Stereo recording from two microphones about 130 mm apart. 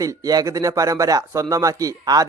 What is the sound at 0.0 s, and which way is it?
Speech, 25° right (ahead or behind).